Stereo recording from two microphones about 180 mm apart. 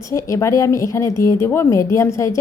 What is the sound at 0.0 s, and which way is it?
A woman's voice, 15° left (ahead or behind).